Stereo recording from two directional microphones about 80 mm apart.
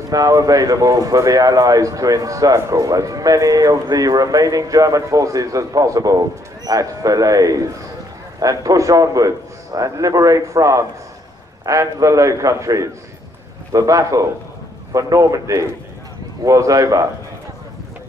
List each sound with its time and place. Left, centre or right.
0.1 s a man's voice: right